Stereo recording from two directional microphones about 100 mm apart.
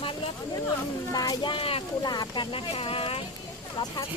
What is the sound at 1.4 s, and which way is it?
Speech, 60° left (ahead or behind).